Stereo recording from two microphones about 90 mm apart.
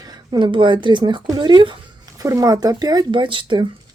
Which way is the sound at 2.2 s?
40° right (ahead or behind).